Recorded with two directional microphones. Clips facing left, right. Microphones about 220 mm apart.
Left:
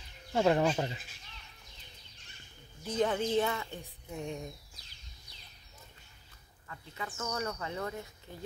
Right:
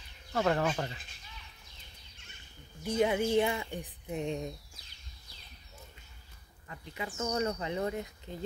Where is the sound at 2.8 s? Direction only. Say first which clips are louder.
Right 2 dB; 10° right (ahead or behind).